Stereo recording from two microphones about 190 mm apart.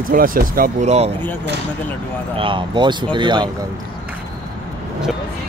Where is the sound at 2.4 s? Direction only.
25° right (ahead or behind).